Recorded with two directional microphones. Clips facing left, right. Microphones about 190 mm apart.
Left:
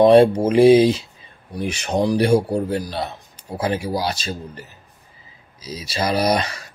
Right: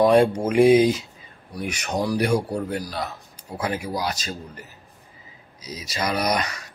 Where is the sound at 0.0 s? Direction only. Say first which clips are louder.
Left 5 dB; 30° left (ahead or behind).